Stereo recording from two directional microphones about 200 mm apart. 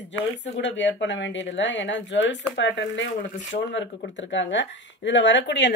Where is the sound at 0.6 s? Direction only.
65° left (ahead or behind).